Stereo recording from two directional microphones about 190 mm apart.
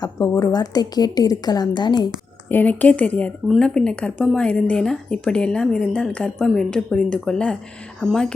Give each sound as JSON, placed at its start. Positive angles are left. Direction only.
{"t": 0.0, "sound": "a woman's voice", "side_deg": 20}
{"t": 2.5, "sound": "a woman's voice", "side_deg": 10}